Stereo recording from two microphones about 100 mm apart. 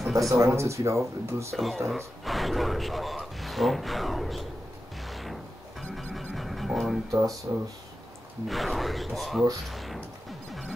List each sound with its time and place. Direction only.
0.0 s a sound: centre (ahead or behind)
0.3 s speech: 30° right (ahead or behind)
1.5 s speech: centre (ahead or behind)
5.0 s music: centre (ahead or behind)
7.1 s speech: 35° right (ahead or behind)
8.5 s speech: centre (ahead or behind)